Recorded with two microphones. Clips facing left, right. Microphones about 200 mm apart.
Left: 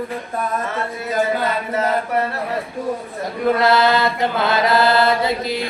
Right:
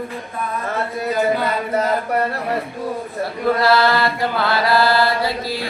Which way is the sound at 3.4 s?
20° left (ahead or behind).